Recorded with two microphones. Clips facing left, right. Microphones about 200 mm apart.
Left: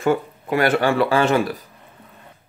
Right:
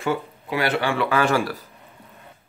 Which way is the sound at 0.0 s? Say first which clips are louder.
Left 5 dB; 50° left (ahead or behind).